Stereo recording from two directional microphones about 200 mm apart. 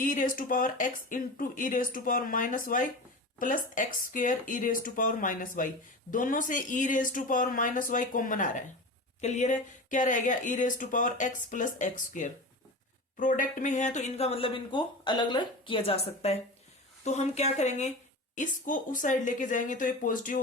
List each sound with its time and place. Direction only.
0.0 s speech: 40° left (ahead or behind)